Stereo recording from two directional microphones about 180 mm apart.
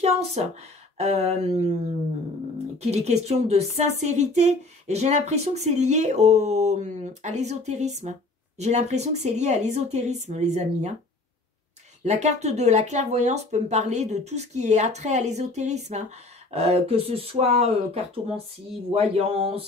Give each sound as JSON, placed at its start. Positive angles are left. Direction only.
{"t": 0.0, "sound": "a sound", "side_deg": -35}
{"t": 0.9, "sound": "speech", "side_deg": -35}
{"t": 2.8, "sound": "speech", "side_deg": -35}
{"t": 12.0, "sound": "speech", "side_deg": -40}
{"t": 18.9, "sound": "speech", "side_deg": -35}